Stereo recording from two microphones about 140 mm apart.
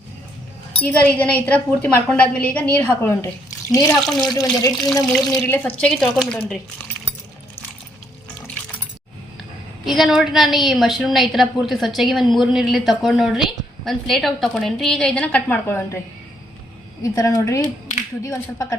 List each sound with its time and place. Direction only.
0.8 s a woman's voice: 10° left (ahead or behind)
4.0 s a woman's voice: centre (ahead or behind)
4.4 s a woman's voice: 25° left (ahead or behind)
5.0 s a woman's voice: 10° left (ahead or behind)
9.8 s a woman's voice: centre (ahead or behind); by 16.0 s 15° left (ahead or behind)
17.0 s a woman's voice: 25° left (ahead or behind)